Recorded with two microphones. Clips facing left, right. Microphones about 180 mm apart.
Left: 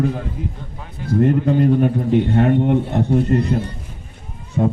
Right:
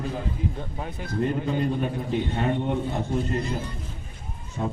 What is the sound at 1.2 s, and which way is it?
A man's voice, 60° left (ahead or behind).